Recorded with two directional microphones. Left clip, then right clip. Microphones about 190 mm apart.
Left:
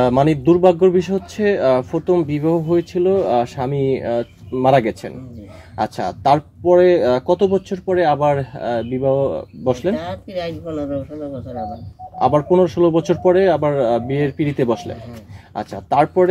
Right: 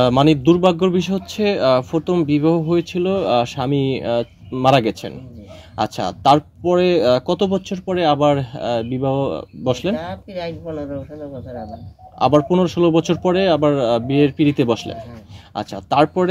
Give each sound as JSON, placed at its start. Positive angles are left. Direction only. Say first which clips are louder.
{"t": 0.0, "sound": "a man's voice", "louder": "right 1 dB", "side_deg": -50}
{"t": 1.4, "sound": "speech", "louder": "even", "side_deg": -45}
{"t": 9.9, "sound": "speech", "louder": "left 2 dB", "side_deg": -10}
{"t": 12.2, "sound": "speech", "louder": "left 1 dB", "side_deg": -50}